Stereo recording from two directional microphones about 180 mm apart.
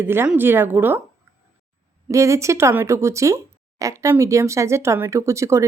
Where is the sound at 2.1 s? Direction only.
15° right (ahead or behind).